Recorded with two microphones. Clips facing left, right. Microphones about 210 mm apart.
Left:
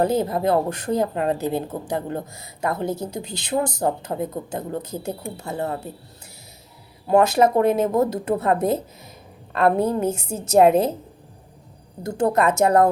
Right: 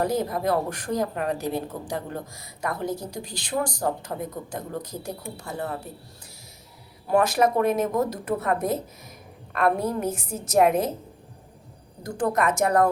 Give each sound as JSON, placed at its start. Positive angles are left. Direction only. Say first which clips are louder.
{"t": 0.0, "sound": "speech", "louder": "left 4 dB", "side_deg": 25}
{"t": 7.1, "sound": "speech", "louder": "left 4 dB", "side_deg": 25}
{"t": 12.0, "sound": "speech", "louder": "left 4 dB", "side_deg": 25}